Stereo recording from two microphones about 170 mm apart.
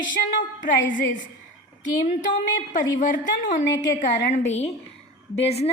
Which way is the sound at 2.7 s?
50° left (ahead or behind).